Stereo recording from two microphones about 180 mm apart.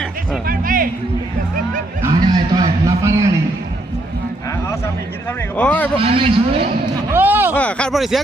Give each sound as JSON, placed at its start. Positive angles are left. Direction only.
{"t": 0.4, "sound": "speech", "side_deg": -50}
{"t": 2.0, "sound": "a sound", "side_deg": -25}
{"t": 5.5, "sound": "a man's voice", "side_deg": 10}
{"t": 6.0, "sound": "a man's voice", "side_deg": -35}
{"t": 7.1, "sound": "a sound", "side_deg": -10}
{"t": 7.5, "sound": "speech", "side_deg": 5}